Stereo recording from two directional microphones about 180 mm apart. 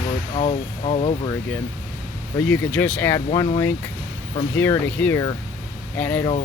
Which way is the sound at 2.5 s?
10° left (ahead or behind).